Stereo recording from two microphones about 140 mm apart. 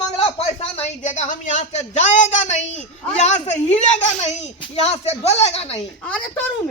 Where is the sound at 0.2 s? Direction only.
45° left (ahead or behind).